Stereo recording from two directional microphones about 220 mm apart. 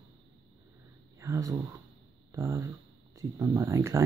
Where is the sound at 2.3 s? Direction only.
15° right (ahead or behind).